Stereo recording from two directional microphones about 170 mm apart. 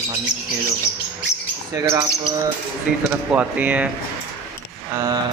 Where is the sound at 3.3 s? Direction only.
10° right (ahead or behind).